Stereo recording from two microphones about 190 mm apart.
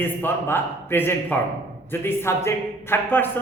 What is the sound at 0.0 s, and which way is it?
A woman's voice, 10° left (ahead or behind).